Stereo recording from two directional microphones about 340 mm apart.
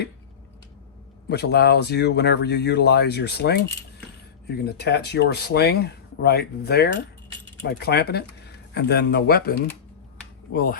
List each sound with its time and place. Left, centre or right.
1.3 s speech: left